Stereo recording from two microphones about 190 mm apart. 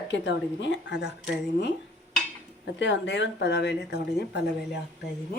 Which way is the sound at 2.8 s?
70° left (ahead or behind).